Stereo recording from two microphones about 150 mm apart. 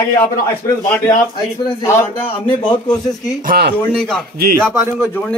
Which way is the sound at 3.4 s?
90° right.